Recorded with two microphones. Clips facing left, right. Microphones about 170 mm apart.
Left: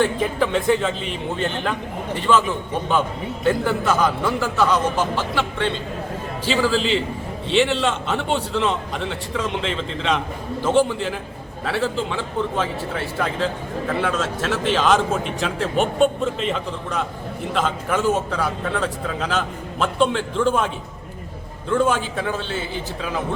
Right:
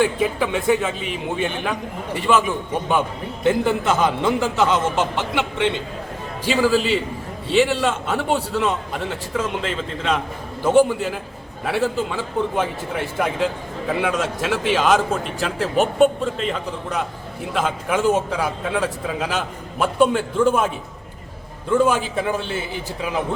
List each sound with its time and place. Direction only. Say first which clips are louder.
0.0 s a man's voice: even; 10° right (ahead or behind)
21.7 s a man's voice: right 2 dB; 10° right (ahead or behind)